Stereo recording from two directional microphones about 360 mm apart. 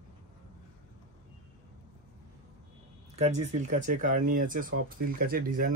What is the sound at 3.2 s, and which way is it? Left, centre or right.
Speech, centre.